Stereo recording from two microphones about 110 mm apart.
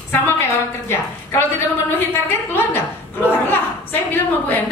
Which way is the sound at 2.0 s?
20° left (ahead or behind).